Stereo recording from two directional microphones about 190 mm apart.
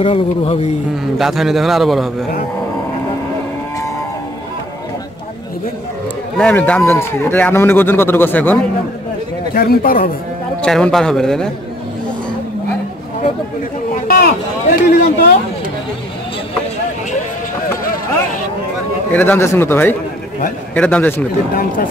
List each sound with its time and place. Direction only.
0.0 s speech: 30° left (ahead or behind)
1.1 s a man's voice: centre (ahead or behind)
6.3 s a man's voice: 10° left (ahead or behind)
9.5 s speech: 50° left (ahead or behind)
10.6 s a man's voice: 5° left (ahead or behind)
14.0 s speech: 50° left (ahead or behind)
19.1 s a man's voice: 10° left (ahead or behind)